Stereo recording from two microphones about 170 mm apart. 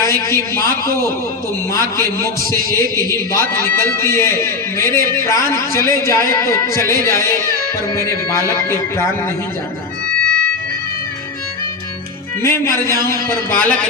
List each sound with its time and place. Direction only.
0.0 s a man's voice: 15° left (ahead or behind)
1.7 s music: 15° left (ahead or behind)
10.1 s music: 50° right (ahead or behind)
12.4 s music: 15° left (ahead or behind)